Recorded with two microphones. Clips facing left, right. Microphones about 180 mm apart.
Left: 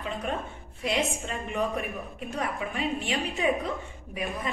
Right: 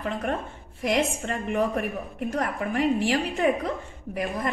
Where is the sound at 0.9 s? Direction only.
65° right (ahead or behind).